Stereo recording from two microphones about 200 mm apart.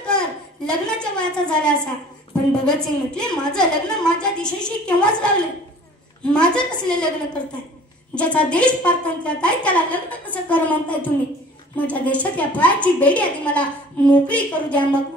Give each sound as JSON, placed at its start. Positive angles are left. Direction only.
{"t": 0.7, "sound": "a woman's voice", "side_deg": 5}
{"t": 8.1, "sound": "a woman's voice", "side_deg": 5}